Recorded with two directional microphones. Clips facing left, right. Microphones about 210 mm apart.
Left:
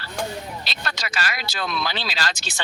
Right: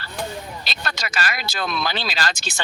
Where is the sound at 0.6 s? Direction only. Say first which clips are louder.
Right 1 dB; 50° right (ahead or behind).